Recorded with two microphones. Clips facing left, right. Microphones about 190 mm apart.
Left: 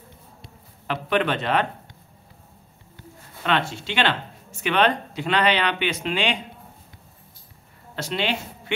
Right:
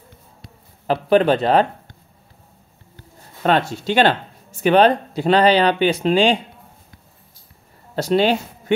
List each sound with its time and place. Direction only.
0.8 s speech: 35° right (ahead or behind)
3.4 s speech: 40° right (ahead or behind)
7.9 s speech: 40° right (ahead or behind)